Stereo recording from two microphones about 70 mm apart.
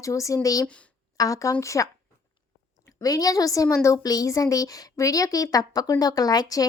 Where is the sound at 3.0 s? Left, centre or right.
Left.